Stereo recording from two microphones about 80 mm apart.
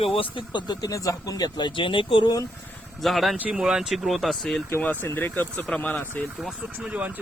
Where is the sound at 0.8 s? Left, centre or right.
Left.